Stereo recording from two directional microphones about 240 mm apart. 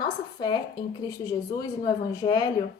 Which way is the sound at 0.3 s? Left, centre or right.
Centre.